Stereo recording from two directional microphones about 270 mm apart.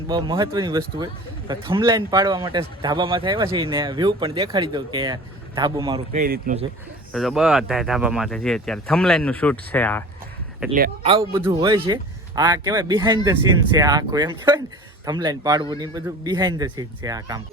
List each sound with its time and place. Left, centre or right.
0.1 s a man's voice: centre
6.1 s speech: right
7.1 s speech: centre
11.0 s a man's voice: centre